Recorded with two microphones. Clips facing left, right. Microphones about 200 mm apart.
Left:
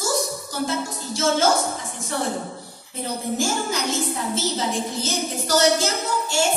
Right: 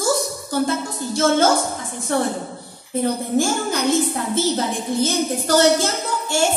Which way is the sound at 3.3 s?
55° right (ahead or behind).